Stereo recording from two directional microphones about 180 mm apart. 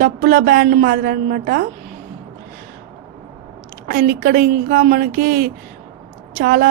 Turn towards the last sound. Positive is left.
turn(degrees=-55)  # may be behind; listen again after turning